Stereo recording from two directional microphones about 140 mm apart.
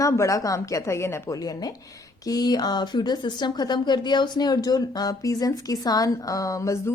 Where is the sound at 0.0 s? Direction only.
20° left (ahead or behind).